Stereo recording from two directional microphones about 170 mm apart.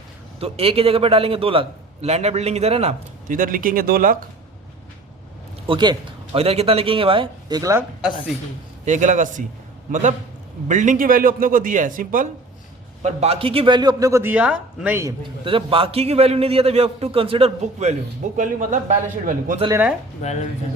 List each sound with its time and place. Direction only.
0.3 s a man's voice: 35° right (ahead or behind)
3.2 s speech: 55° right (ahead or behind)
5.6 s a man's voice: 25° right (ahead or behind)
8.8 s a man's voice: 45° right (ahead or behind)
13.0 s a man's voice: 40° right (ahead or behind); by 15.1 s 10° right (ahead or behind)
15.4 s a man's voice: 30° right (ahead or behind); by 19.5 s 50° right (ahead or behind)
19.7 s speech: 10° right (ahead or behind)
20.2 s speech: 40° left (ahead or behind)